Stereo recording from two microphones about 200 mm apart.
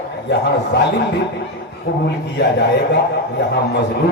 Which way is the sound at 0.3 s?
60° left (ahead or behind).